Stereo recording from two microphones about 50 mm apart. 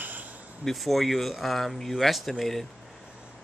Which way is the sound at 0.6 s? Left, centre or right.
Centre.